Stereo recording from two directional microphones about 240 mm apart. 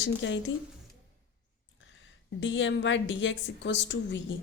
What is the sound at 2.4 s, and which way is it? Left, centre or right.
A woman's voice, left.